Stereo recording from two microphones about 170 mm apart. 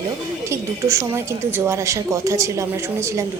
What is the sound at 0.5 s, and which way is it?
A woman's voice, 15° right (ahead or behind).